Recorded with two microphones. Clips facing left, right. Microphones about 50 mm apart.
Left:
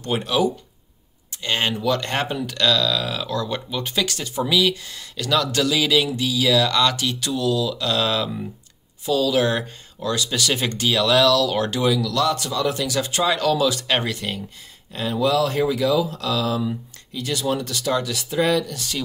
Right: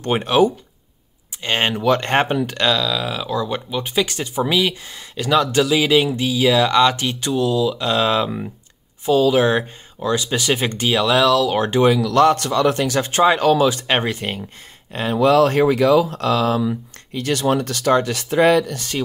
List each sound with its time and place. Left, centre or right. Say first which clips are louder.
0.0 s speech: right 5 dB; right
2.8 s speech: right 1 dB; centre; by 14.4 s right
14.9 s speech: right 5 dB; right